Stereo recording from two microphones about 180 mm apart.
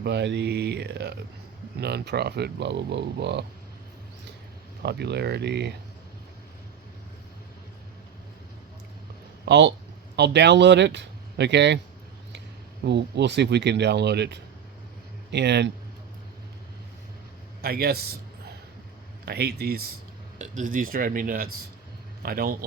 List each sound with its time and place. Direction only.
0.0 s speech: 75° right (ahead or behind)
4.8 s speech: 65° right (ahead or behind)
9.5 s speech: 75° right (ahead or behind)
12.8 s speech: 70° right (ahead or behind)
17.6 s speech: 60° right (ahead or behind)
19.2 s speech: 65° right (ahead or behind)
20.4 s speech: 45° right (ahead or behind)